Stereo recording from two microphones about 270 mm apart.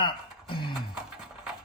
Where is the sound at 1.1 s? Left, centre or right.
Centre.